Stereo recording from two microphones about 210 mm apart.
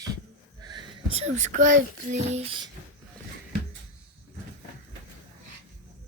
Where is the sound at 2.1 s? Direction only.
30° right (ahead or behind).